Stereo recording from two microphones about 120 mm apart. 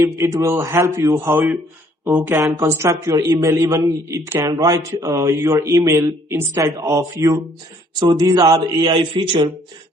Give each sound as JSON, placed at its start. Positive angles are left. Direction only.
{"t": 0.0, "sound": "speech", "side_deg": -25}